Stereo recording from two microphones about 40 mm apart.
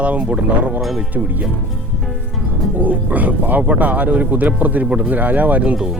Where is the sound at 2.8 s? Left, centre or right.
Right.